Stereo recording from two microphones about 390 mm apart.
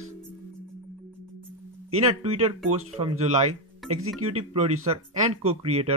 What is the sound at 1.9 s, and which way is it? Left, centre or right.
Speech, centre.